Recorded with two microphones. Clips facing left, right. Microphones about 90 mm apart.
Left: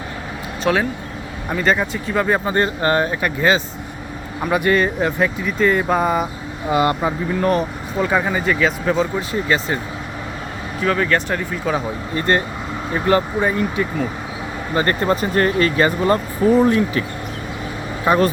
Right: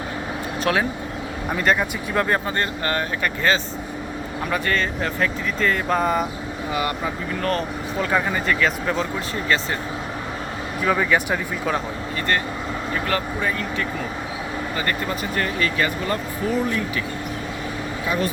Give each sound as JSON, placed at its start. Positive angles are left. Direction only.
{"t": 0.6, "sound": "speech", "side_deg": 0}
{"t": 2.4, "sound": "speech", "side_deg": 20}
{"t": 3.2, "sound": "speech", "side_deg": 15}
{"t": 6.7, "sound": "speech", "side_deg": 30}
{"t": 7.4, "sound": "speech", "side_deg": 10}
{"t": 10.8, "sound": "speech", "side_deg": -5}
{"t": 12.1, "sound": "speech", "side_deg": 25}
{"t": 14.8, "sound": "speech", "side_deg": 40}
{"t": 18.0, "sound": "speech", "side_deg": 50}